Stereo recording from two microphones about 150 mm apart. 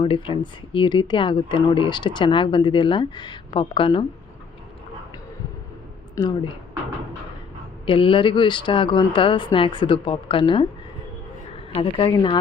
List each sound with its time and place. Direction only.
0.0 s speech: 35° left (ahead or behind)
6.2 s speech: 20° left (ahead or behind)
7.9 s a woman's voice: 35° left (ahead or behind)